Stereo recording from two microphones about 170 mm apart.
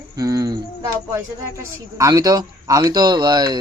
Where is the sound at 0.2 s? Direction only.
20° right (ahead or behind).